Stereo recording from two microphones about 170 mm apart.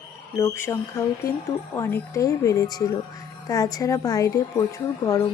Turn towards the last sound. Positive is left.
turn(degrees=20)  # may be behind; listen again after turning